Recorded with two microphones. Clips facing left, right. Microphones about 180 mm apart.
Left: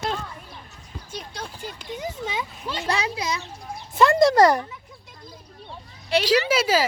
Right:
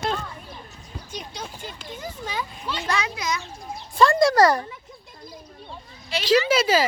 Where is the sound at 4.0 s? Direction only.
20° left (ahead or behind).